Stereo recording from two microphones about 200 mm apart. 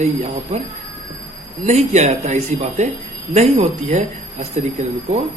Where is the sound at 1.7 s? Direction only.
35° right (ahead or behind).